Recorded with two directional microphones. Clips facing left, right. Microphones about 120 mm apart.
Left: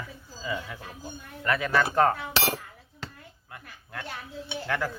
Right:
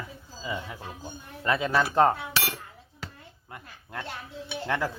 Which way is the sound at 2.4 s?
35° left (ahead or behind).